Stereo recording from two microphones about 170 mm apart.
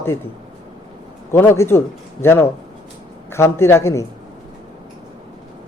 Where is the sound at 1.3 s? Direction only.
15° left (ahead or behind).